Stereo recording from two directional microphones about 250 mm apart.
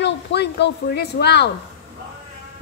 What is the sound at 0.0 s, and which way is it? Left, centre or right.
Speech, left.